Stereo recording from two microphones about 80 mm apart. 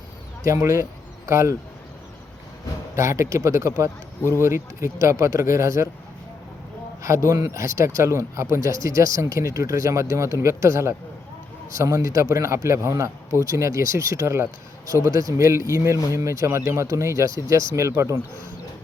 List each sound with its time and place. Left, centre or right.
0.4 s a man's voice: right
2.9 s a man's voice: right
7.0 s a man's voice: right